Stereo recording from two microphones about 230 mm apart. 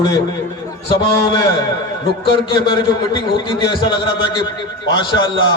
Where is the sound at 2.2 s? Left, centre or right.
Left.